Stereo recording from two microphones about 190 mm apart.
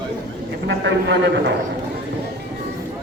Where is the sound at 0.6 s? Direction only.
70° right (ahead or behind).